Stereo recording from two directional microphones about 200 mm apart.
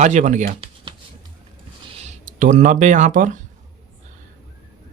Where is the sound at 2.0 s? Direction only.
40° right (ahead or behind).